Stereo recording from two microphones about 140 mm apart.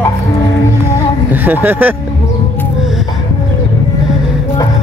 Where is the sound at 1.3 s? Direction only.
15° right (ahead or behind).